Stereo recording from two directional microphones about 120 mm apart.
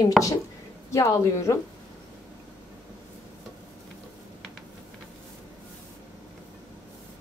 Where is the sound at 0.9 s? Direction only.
25° left (ahead or behind).